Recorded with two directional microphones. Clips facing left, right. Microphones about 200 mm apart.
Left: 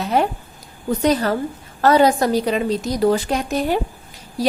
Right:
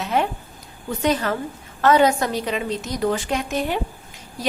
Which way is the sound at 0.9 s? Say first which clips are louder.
Left 4 dB; 35° left (ahead or behind).